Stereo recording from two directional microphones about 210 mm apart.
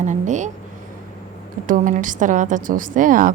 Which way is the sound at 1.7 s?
40° right (ahead or behind).